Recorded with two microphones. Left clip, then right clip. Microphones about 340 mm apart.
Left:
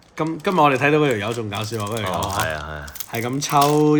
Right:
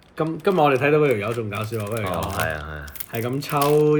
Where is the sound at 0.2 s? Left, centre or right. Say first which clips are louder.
Left 2 dB; left.